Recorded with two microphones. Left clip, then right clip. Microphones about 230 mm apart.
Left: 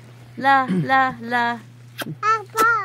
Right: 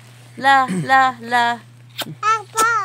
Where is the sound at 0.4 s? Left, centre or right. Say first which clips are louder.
Right 3 dB; centre.